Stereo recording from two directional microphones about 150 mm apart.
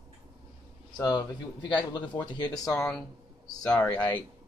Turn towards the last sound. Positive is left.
turn(degrees=10)  # may be behind; listen again after turning